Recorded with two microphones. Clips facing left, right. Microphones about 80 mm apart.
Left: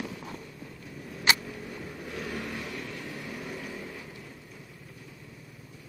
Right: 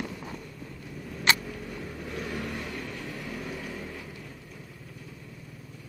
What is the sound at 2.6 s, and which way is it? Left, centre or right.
Vehicle, centre.